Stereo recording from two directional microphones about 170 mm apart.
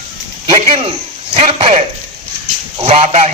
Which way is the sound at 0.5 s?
35° right (ahead or behind).